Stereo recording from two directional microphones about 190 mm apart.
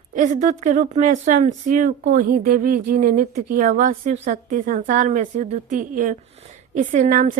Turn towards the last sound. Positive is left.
turn(degrees=-40)  # may be behind; listen again after turning